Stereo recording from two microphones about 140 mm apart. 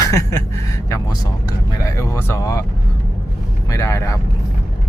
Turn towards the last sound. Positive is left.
turn(degrees=20)  # may be behind; listen again after turning